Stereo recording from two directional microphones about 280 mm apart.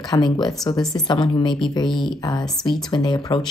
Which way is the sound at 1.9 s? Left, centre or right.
Centre.